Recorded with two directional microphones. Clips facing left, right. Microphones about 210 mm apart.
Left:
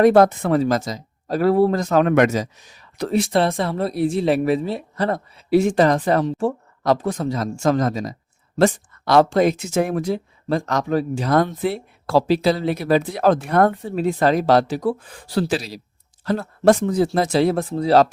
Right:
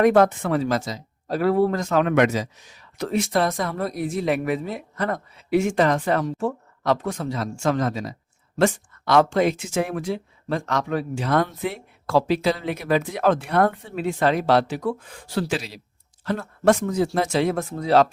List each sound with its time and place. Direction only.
0.0 s speech: 35° left (ahead or behind)